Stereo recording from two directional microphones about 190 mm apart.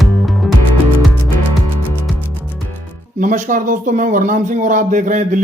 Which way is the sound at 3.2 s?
45° right (ahead or behind).